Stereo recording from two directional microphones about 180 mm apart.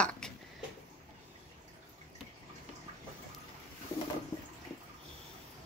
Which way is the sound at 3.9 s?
15° left (ahead or behind).